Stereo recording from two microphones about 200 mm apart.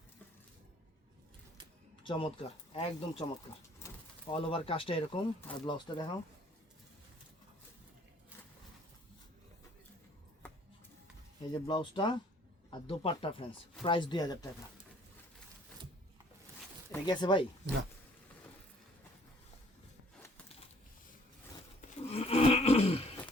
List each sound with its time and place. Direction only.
2.0 s speech: 25° left (ahead or behind)
4.3 s speech: 30° left (ahead or behind)
5.4 s speech: 10° left (ahead or behind)
5.6 s speech: 25° left (ahead or behind)
11.6 s speech: 25° left (ahead or behind)
16.9 s speech: 20° left (ahead or behind)
21.8 s a sound: 30° left (ahead or behind)